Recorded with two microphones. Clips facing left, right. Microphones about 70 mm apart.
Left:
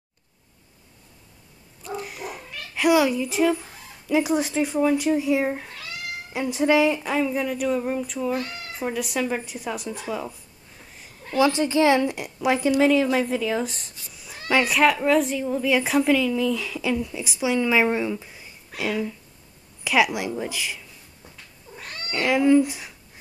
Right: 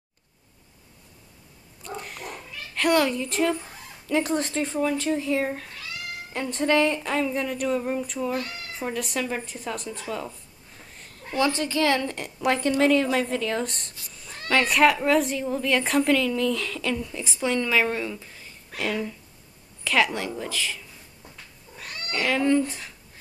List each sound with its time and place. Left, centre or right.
1.8 s a child's voice: centre
8.3 s speech: centre
8.7 s speech: centre
10.9 s a sound: centre
11.3 s speech: centre
21.7 s cat: left
22.1 s speech: centre